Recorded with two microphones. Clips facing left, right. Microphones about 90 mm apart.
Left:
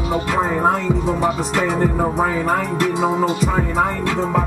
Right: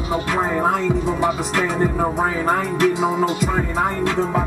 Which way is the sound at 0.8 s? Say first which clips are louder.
Left 1 dB; 65° left (ahead or behind).